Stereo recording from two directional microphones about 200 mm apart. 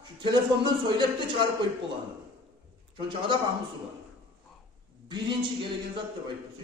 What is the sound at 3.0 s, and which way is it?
Speech, 25° right (ahead or behind).